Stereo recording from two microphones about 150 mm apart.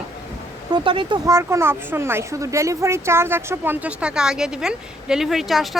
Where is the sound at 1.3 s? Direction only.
20° right (ahead or behind).